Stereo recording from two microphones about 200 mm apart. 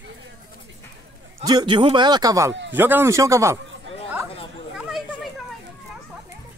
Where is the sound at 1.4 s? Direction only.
20° right (ahead or behind).